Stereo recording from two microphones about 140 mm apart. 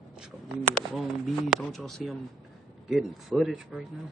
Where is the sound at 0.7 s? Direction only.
Centre (ahead or behind).